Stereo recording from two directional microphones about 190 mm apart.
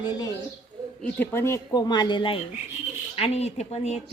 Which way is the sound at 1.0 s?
10° left (ahead or behind).